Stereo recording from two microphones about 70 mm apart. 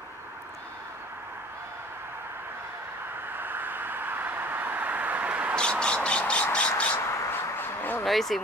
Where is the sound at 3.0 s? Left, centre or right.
Right.